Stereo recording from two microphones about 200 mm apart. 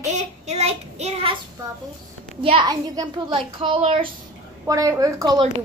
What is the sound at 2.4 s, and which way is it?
A child's voice, 25° right (ahead or behind).